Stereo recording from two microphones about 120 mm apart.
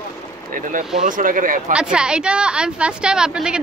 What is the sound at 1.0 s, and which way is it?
Speech, 90° right.